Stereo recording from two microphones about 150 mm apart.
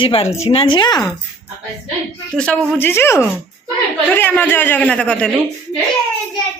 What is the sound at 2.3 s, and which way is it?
A man's voice, 5° left (ahead or behind).